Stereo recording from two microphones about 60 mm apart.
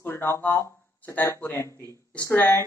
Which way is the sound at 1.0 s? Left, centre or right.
Left.